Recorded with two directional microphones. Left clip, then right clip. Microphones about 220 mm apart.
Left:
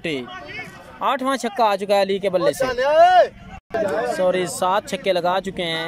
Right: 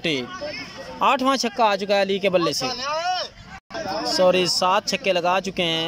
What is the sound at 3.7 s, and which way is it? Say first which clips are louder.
Speech: left 6 dB; 45° left (ahead or behind).